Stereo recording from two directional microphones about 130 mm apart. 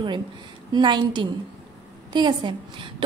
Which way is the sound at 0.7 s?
35° right (ahead or behind).